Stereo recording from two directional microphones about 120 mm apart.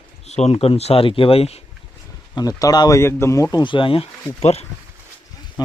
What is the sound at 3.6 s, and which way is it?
Speech, 45° left (ahead or behind).